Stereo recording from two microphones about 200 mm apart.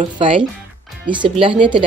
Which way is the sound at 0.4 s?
5° right (ahead or behind).